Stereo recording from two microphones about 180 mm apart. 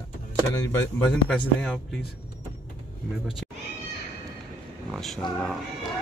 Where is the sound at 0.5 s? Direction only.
15° left (ahead or behind).